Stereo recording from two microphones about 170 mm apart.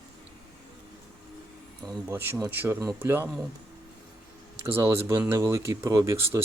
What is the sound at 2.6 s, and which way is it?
Speech, 20° right (ahead or behind).